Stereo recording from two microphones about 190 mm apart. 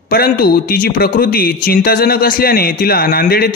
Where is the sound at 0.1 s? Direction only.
50° left (ahead or behind).